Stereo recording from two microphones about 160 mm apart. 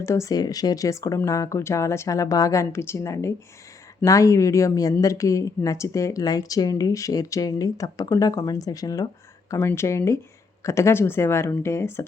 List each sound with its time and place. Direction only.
0.0 s speech: 20° left (ahead or behind)